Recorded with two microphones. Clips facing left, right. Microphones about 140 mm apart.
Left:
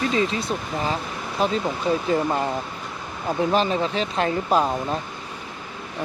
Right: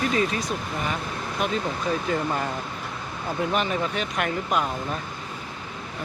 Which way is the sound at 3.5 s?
30° left (ahead or behind).